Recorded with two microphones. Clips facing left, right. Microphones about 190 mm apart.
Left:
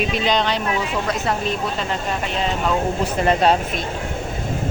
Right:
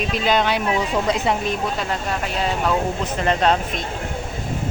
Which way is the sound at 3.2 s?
10° left (ahead or behind).